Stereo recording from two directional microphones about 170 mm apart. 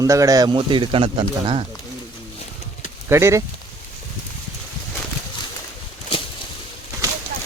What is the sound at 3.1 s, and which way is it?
Speech, 15° right (ahead or behind).